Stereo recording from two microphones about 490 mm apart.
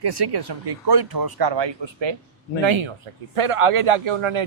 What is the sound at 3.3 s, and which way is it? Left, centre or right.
A man's voice, right.